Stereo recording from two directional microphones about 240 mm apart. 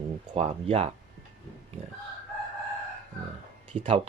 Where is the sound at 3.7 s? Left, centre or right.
Right.